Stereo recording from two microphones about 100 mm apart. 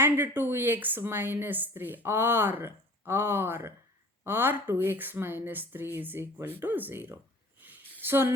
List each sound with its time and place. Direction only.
0.0 s speech: 20° right (ahead or behind)